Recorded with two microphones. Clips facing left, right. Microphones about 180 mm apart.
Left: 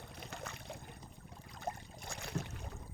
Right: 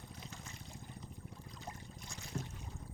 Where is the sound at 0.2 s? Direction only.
65° left (ahead or behind).